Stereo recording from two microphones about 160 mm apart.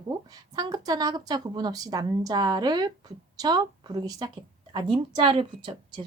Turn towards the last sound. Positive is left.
turn(degrees=-30)  # may be behind; listen again after turning